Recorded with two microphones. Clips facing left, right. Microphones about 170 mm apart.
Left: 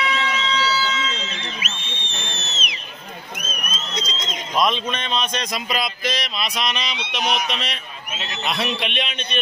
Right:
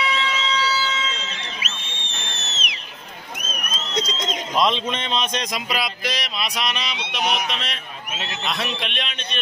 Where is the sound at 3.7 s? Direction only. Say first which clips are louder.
Right 5 dB; 65° right (ahead or behind).